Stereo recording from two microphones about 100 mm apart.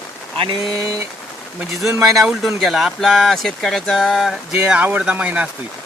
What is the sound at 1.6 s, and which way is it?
Speech, 5° right (ahead or behind).